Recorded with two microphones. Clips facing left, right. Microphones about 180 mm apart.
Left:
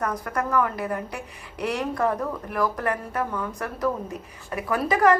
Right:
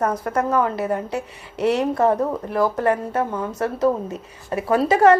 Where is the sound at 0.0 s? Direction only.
25° right (ahead or behind).